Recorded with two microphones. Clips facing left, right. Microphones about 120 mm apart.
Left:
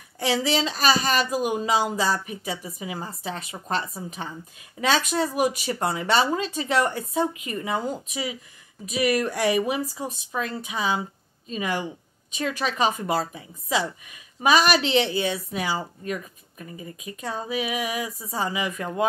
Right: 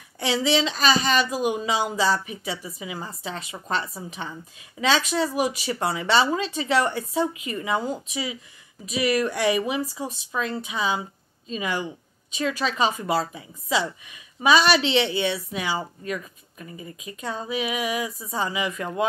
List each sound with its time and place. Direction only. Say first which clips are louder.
0.2 s speech: right 1 dB; 40° left (ahead or behind)